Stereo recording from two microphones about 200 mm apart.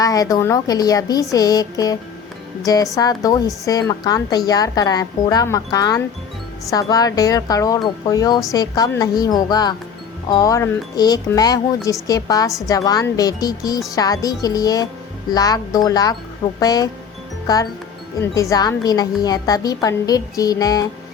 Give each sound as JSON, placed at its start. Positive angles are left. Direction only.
{"t": 0.0, "sound": "a woman's voice", "side_deg": 15}